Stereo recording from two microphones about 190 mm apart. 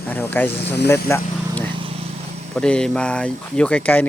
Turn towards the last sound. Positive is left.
turn(degrees=10)  # may be behind; listen again after turning